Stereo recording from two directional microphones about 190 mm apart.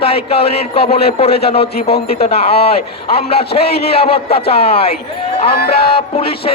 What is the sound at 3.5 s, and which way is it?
Speech, 55° left (ahead or behind).